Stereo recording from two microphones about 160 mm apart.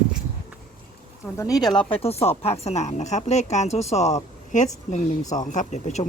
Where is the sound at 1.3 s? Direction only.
20° left (ahead or behind); by 6.0 s 45° left (ahead or behind).